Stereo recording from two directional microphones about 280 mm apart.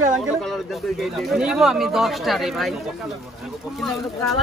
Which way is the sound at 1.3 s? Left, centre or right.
Centre.